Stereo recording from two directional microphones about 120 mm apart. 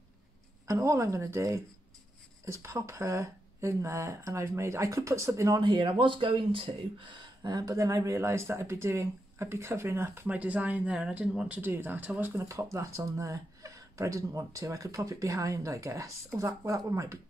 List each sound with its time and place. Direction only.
0.7 s speech: 25° right (ahead or behind)
5.6 s speech: 40° right (ahead or behind); by 17.2 s 25° right (ahead or behind)